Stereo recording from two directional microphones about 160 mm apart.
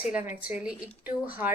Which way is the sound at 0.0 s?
10° right (ahead or behind).